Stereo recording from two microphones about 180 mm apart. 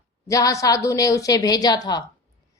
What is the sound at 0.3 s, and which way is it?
A woman's voice, 20° left (ahead or behind).